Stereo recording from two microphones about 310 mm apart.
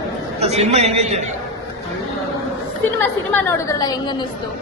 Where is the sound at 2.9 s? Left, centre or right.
Centre.